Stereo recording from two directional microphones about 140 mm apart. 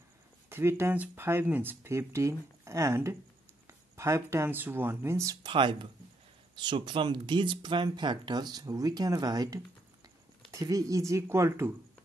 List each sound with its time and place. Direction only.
0.5 s speech: 15° right (ahead or behind)